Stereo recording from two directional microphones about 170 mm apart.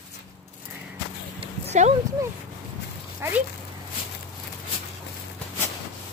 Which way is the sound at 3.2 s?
15° right (ahead or behind).